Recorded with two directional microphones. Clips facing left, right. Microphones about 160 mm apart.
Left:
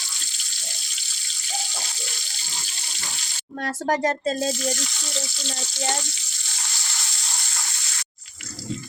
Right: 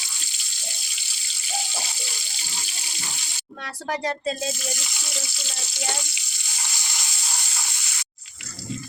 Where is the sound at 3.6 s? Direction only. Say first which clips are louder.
Left 5 dB; 45° left (ahead or behind).